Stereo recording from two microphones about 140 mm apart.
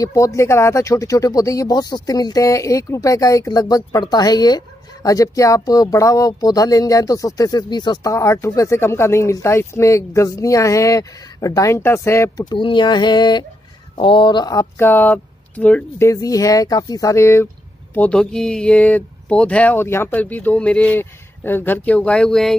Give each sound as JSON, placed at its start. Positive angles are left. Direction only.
{"t": 0.0, "sound": "speech", "side_deg": 20}
{"t": 12.5, "sound": "a sound", "side_deg": 35}
{"t": 13.9, "sound": "speech", "side_deg": 35}
{"t": 16.1, "sound": "speech", "side_deg": 25}